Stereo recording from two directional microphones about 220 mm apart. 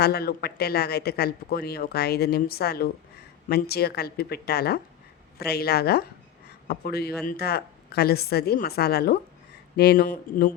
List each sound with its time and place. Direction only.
0.0 s speech: 45° left (ahead or behind)